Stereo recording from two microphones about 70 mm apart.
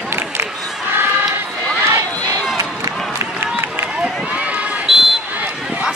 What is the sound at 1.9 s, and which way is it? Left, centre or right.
Run, right.